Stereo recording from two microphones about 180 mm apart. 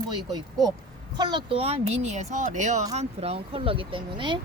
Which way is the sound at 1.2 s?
25° right (ahead or behind).